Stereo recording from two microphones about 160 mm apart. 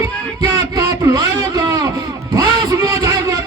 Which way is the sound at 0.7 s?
25° right (ahead or behind).